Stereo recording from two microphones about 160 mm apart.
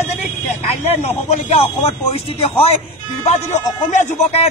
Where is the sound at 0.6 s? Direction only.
45° left (ahead or behind).